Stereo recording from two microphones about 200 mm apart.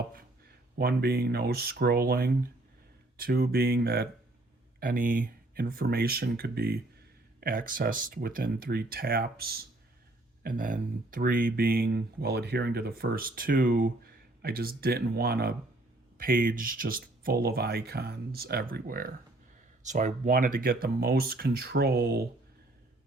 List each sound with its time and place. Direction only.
0.1 s speech: 50° right (ahead or behind)